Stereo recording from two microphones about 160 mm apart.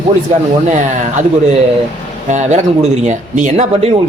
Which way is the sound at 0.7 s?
50° right (ahead or behind).